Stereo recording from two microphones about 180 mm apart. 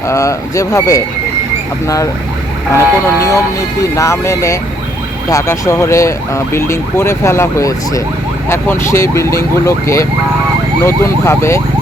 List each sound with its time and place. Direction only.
0.1 s speech: 15° left (ahead or behind)
2.7 s speech: 15° left (ahead or behind)